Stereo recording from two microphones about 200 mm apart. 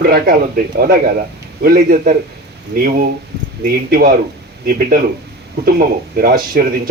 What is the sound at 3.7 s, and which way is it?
Speech, 45° right (ahead or behind).